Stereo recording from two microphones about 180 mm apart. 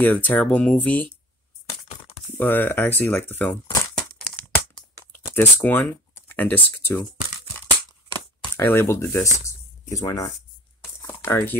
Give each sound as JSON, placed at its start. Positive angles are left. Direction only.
{"t": 0.0, "sound": "speech", "side_deg": 10}
{"t": 1.9, "sound": "a sound", "side_deg": 35}
{"t": 2.3, "sound": "speech", "side_deg": 10}
{"t": 8.5, "sound": "speech", "side_deg": 15}
{"t": 11.0, "sound": "crumpling", "side_deg": 15}